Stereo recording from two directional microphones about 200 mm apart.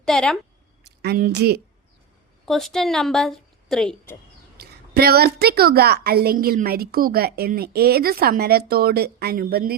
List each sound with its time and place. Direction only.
0.0 s a woman's voice: 5° left (ahead or behind)
0.9 s a woman's voice: 50° right (ahead or behind)
2.5 s a woman's voice: centre (ahead or behind)
4.5 s a woman's voice: 50° right (ahead or behind)